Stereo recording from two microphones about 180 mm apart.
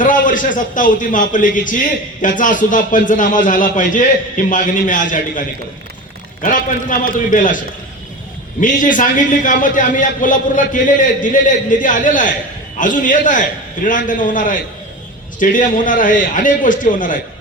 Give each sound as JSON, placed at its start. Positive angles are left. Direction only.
{"t": 0.0, "sound": "a man's voice", "side_deg": 45}
{"t": 8.6, "sound": "a man's voice", "side_deg": 45}